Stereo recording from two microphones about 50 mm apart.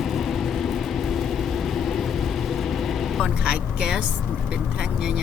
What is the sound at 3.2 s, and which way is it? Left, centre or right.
Speech, centre.